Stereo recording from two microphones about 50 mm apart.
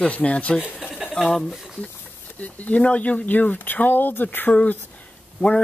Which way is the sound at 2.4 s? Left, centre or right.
Left.